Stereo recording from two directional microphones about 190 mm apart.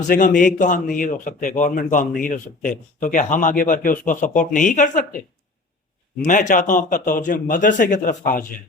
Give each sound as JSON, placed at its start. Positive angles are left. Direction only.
{"t": 0.1, "sound": "a man's voice", "side_deg": 45}
{"t": 6.2, "sound": "a man's voice", "side_deg": 45}